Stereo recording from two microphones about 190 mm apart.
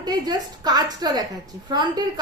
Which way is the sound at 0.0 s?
20° right (ahead or behind).